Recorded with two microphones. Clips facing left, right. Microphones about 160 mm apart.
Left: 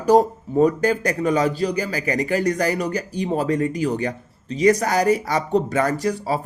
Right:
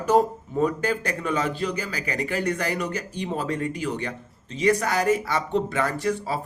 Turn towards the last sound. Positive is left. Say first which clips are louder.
# left 4 dB
turn(degrees=40)  # may be behind; listen again after turning